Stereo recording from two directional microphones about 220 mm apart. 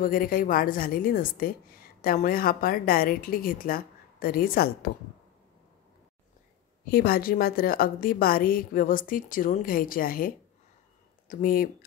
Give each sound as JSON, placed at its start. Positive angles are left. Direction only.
{"t": 0.0, "sound": "a woman's voice", "side_deg": 40}
{"t": 6.9, "sound": "a woman's voice", "side_deg": 45}